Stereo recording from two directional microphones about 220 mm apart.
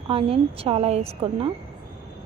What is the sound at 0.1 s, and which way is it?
A woman's voice, 25° right (ahead or behind).